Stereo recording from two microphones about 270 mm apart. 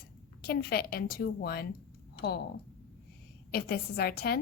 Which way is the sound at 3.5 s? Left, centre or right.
Left.